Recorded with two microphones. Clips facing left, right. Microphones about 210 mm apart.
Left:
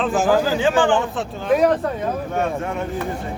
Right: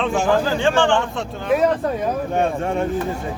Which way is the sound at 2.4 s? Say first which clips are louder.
Right 3 dB; 30° right (ahead or behind).